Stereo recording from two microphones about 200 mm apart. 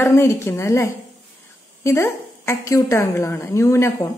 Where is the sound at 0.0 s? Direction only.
15° left (ahead or behind).